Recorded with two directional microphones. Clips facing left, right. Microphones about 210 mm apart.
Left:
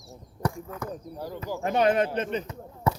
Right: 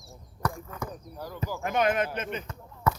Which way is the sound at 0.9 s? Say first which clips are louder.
Left 4 dB; 25° left (ahead or behind).